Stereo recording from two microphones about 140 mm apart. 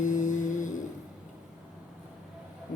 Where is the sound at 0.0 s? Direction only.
65° left (ahead or behind).